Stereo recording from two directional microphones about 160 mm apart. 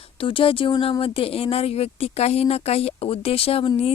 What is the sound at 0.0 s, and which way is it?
Speech, 35° left (ahead or behind).